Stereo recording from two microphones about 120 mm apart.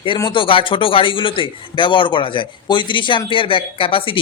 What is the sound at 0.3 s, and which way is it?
A man's voice, 45° left (ahead or behind).